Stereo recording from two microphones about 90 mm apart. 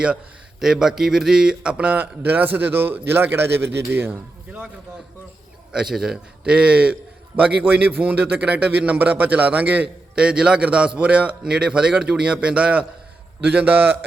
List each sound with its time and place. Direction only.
0.6 s a man's voice: 5° right (ahead or behind)
5.7 s a man's voice: 5° right (ahead or behind)